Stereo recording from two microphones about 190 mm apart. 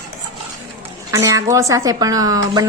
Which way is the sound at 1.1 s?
15° right (ahead or behind).